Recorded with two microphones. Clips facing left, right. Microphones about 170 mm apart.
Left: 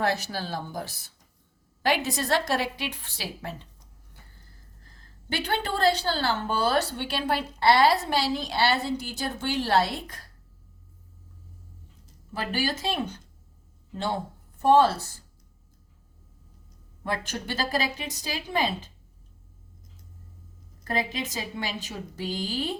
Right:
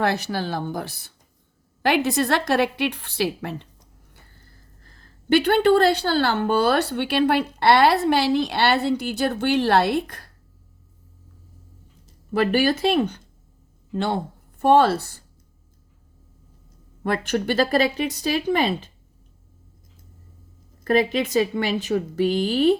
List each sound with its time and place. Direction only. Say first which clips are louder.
0.0 s a woman's voice: right 4 dB; 65° right (ahead or behind)
5.3 s a woman's voice: right 13 dB; 65° right (ahead or behind)
12.3 s a woman's voice: right 10 dB; 65° right (ahead or behind)
17.0 s a woman's voice: right 8 dB; 65° right (ahead or behind)
20.8 s a woman's voice: right 10 dB; 65° right (ahead or behind)